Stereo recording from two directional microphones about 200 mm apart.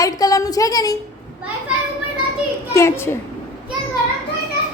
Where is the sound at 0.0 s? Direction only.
15° left (ahead or behind).